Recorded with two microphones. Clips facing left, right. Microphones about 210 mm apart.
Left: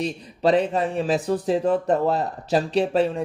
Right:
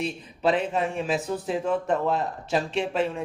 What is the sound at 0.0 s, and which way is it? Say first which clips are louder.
Speech: left 3 dB; 35° left (ahead or behind).